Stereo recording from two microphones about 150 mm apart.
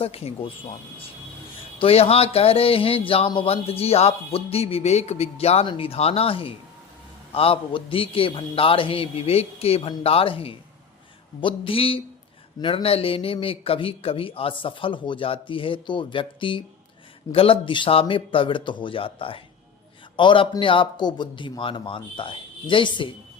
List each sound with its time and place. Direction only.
0.0 s speech: 40° left (ahead or behind)